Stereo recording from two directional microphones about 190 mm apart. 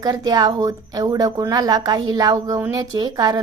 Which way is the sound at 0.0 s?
20° right (ahead or behind).